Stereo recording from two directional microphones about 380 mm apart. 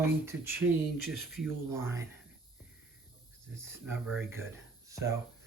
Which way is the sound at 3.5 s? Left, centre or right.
Centre.